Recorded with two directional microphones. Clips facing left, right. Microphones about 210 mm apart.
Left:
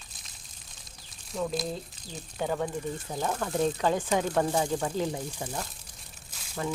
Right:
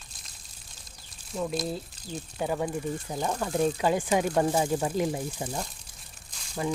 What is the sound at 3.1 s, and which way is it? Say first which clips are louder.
Speech: even; 20° right (ahead or behind).